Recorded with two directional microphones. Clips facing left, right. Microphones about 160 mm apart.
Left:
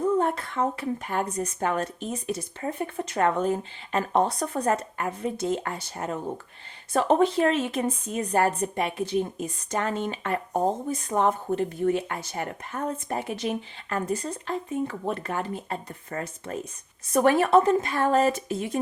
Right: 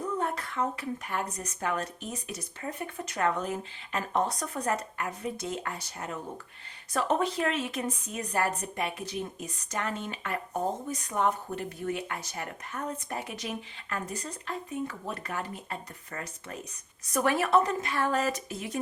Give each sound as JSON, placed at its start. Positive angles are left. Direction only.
{"t": 0.2, "sound": "speech", "side_deg": 30}